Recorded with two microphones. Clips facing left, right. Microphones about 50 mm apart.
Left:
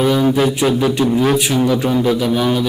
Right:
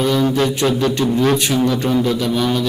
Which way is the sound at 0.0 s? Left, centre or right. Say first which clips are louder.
Left 2 dB; centre.